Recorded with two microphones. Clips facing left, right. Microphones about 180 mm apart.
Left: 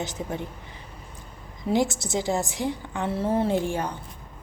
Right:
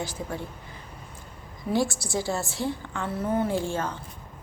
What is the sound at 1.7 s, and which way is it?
A woman's voice, 20° left (ahead or behind).